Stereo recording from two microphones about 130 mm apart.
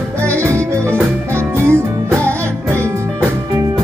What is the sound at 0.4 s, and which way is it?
Music, 20° right (ahead or behind).